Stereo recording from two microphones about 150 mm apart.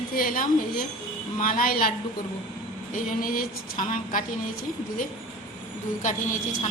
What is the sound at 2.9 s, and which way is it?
Speech, 65° left (ahead or behind).